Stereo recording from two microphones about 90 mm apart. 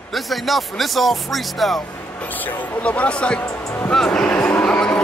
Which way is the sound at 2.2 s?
20° left (ahead or behind).